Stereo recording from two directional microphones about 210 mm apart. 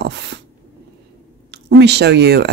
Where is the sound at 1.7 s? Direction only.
55° right (ahead or behind).